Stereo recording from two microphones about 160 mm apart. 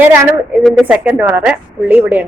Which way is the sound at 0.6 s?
Centre (ahead or behind).